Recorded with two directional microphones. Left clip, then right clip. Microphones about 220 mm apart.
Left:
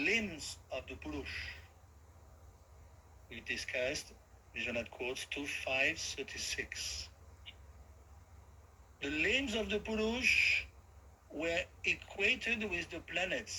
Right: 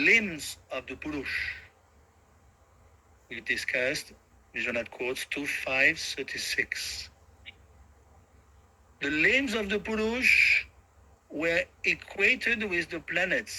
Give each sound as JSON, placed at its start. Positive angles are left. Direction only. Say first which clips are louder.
{"t": 0.0, "sound": "speech", "louder": "right 11 dB", "side_deg": -35}
{"t": 3.2, "sound": "speech", "louder": "right 10 dB", "side_deg": -35}
{"t": 9.0, "sound": "speech", "louder": "right 9 dB", "side_deg": -35}